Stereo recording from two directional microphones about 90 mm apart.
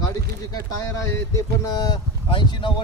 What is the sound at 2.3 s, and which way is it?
Speech, 65° left (ahead or behind).